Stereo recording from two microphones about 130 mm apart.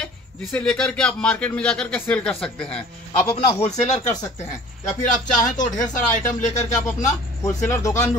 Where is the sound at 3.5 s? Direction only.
55° left (ahead or behind).